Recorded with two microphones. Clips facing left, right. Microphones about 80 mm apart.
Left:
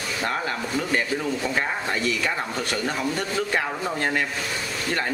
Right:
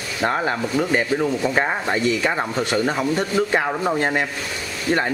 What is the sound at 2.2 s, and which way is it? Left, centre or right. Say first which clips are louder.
Speech: right 5 dB; right.